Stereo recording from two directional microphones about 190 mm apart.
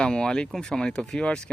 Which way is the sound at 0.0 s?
5° left (ahead or behind).